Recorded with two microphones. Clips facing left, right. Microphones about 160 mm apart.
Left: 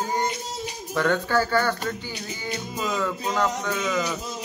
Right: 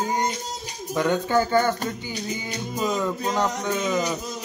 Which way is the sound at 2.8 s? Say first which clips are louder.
Right 2 dB; 20° right (ahead or behind).